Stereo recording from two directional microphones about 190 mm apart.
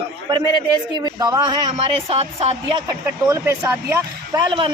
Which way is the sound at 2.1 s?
35° right (ahead or behind).